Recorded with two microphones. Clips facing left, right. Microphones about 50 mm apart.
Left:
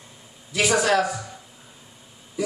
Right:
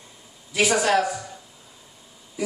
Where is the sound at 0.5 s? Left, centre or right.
Centre.